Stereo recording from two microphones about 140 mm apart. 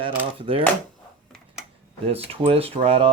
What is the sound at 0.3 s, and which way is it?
Speech, 40° right (ahead or behind).